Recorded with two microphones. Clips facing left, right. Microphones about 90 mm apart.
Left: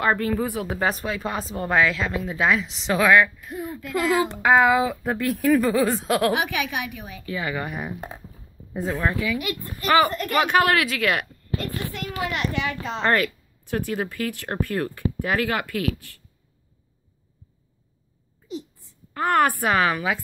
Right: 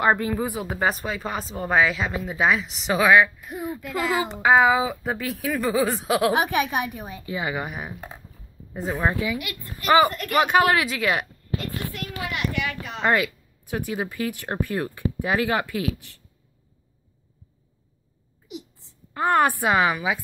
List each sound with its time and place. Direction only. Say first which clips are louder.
0.0 s speech: right 1 dB; 15° right (ahead or behind)
3.8 s a woman's voice: left 4 dB; 20° right (ahead or behind)
4.3 s speech: right 2 dB; 5° right (ahead or behind)
6.3 s a woman's voice: right 3 dB; 35° right (ahead or behind); by 9.0 s centre (ahead or behind)
9.0 s a woman's voice: right 1 dB; 20° right (ahead or behind)
9.5 s speech: left 7 dB; 30° left (ahead or behind)
9.8 s a woman's voice: right 1 dB; 20° right (ahead or behind)
12.4 s speech: left 1 dB; 25° left (ahead or behind)
13.0 s speech: even; 10° right (ahead or behind)
18.5 s a woman's voice: left 4 dB; 20° right (ahead or behind)